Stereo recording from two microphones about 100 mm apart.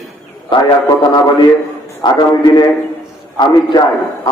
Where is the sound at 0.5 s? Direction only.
55° left (ahead or behind).